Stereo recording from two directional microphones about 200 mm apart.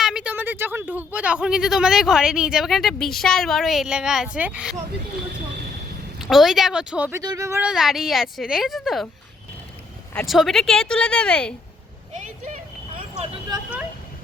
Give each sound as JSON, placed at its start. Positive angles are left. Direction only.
{"t": 0.0, "sound": "speech", "side_deg": -5}
{"t": 6.1, "sound": "speech", "side_deg": 0}
{"t": 7.2, "sound": "speech", "side_deg": -15}
{"t": 10.2, "sound": "speech", "side_deg": 0}
{"t": 13.0, "sound": "vehicle", "side_deg": -25}